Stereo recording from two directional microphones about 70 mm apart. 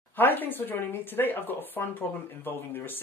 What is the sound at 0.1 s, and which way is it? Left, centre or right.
Speech, left.